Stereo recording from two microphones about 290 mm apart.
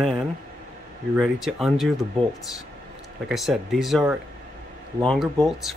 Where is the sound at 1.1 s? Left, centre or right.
Centre.